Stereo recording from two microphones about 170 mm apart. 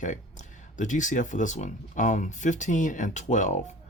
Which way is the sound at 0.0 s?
50° left (ahead or behind).